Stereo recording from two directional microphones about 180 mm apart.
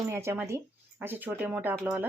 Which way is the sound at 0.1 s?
15° right (ahead or behind).